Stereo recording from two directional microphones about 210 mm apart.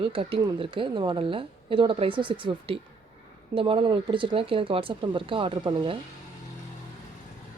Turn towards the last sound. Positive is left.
turn(degrees=-25)  # may be behind; listen again after turning